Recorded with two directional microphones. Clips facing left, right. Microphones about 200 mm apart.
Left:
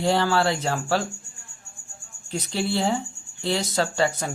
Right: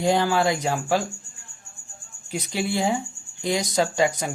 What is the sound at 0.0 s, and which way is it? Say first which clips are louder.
Speech: right 1 dB; 15° right (ahead or behind).